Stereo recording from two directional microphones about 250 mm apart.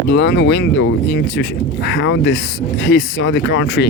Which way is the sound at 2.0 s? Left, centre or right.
Left.